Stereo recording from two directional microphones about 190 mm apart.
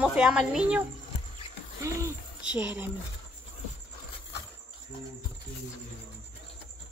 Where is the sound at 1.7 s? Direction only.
15° right (ahead or behind).